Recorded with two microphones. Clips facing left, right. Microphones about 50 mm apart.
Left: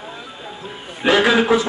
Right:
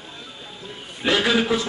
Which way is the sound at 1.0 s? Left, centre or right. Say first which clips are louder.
Left 5 dB; centre.